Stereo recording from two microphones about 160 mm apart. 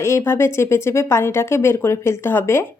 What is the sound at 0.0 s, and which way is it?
A woman's voice, 15° left (ahead or behind).